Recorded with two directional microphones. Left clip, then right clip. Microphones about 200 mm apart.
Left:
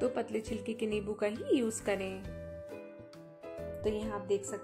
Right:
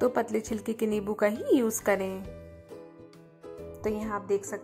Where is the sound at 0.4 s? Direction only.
15° right (ahead or behind).